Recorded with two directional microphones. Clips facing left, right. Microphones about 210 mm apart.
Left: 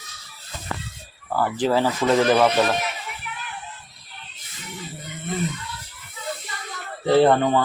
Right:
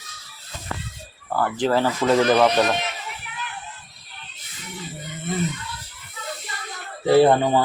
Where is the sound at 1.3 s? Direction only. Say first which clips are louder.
Even; 5° left (ahead or behind).